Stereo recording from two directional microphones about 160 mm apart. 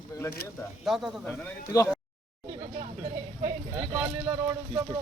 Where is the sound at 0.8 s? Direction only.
Centre (ahead or behind).